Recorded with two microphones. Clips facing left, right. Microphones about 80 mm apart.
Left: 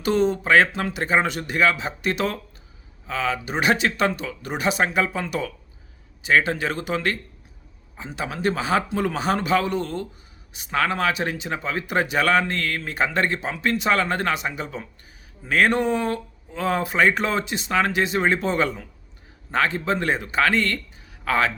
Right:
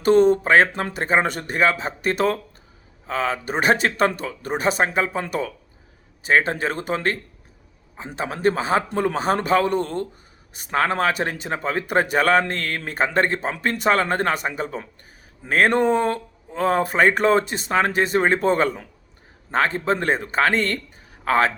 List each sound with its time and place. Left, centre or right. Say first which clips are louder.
0.0 s a man's voice: right 6 dB; right